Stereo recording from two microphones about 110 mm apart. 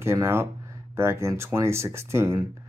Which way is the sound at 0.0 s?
25° right (ahead or behind).